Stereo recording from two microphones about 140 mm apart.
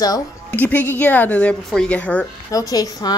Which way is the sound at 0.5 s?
10° left (ahead or behind).